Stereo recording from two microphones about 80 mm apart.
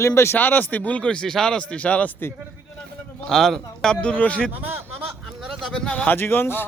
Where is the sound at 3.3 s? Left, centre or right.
Centre.